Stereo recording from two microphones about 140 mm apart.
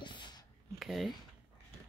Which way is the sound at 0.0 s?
35° left (ahead or behind).